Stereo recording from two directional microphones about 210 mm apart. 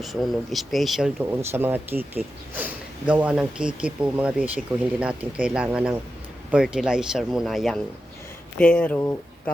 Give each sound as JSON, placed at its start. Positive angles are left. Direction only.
{"t": 0.0, "sound": "speech", "side_deg": 0}